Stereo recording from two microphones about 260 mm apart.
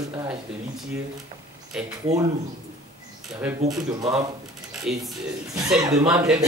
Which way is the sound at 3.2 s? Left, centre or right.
Centre.